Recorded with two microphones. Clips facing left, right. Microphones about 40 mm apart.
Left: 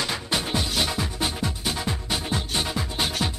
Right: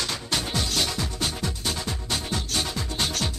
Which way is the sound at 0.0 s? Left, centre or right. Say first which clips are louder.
Left 2 dB; centre.